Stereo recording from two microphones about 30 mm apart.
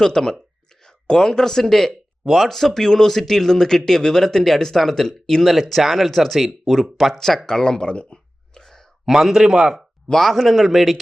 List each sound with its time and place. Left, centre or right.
0.0 s speech: centre
0.9 s whispering: left
1.4 s speech: centre
5.8 s speech: centre
6.9 s speech: centre
7.3 s speech: left
8.6 s a sound: centre
9.0 s a man's voice: centre
10.2 s speech: centre